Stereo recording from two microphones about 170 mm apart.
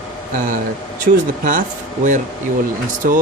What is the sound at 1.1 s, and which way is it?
Speech, 55° right (ahead or behind).